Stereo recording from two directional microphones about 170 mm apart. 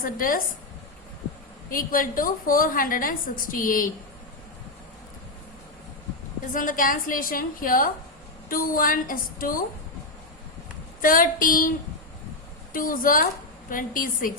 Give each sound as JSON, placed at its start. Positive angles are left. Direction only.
{"t": 0.0, "sound": "a woman's voice", "side_deg": 55}
{"t": 1.7, "sound": "a woman's voice", "side_deg": 55}
{"t": 6.5, "sound": "a woman's voice", "side_deg": 50}
{"t": 11.0, "sound": "female singing", "side_deg": 55}
{"t": 12.7, "sound": "female singing", "side_deg": 55}